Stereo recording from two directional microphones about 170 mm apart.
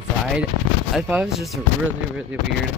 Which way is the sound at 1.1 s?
5° right (ahead or behind).